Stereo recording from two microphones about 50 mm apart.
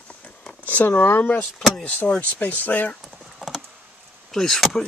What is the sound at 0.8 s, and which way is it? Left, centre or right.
Speech, left.